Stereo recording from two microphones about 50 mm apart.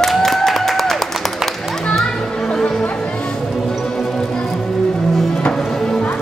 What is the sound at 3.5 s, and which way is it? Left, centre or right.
Music, centre.